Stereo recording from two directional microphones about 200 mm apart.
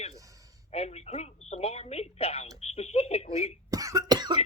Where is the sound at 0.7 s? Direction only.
30° left (ahead or behind).